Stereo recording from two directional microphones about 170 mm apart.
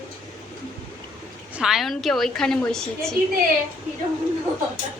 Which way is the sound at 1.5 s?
Centre (ahead or behind).